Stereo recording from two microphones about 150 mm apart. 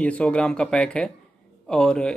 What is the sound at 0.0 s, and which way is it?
Speech, 10° left (ahead or behind).